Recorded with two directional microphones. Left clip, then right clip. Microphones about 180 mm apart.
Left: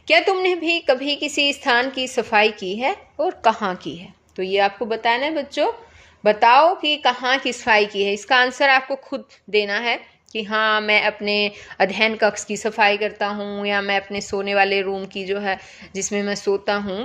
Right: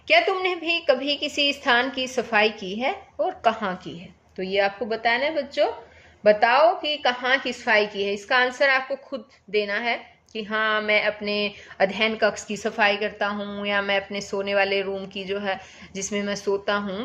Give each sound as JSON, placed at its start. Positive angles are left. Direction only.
{"t": 0.1, "sound": "a woman's voice", "side_deg": 35}